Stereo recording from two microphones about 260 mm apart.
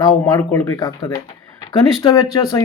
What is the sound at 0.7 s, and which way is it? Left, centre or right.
A man's voice, centre.